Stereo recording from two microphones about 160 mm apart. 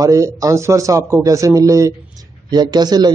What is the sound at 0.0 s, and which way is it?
A man's voice, 20° right (ahead or behind).